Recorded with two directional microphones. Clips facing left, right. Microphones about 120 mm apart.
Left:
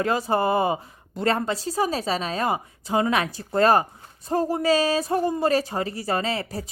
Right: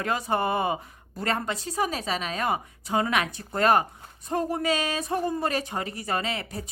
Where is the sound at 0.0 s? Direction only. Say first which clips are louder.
Left 4 dB; 30° left (ahead or behind).